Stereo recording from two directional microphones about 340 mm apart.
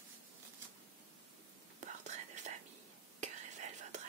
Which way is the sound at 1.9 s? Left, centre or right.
Right.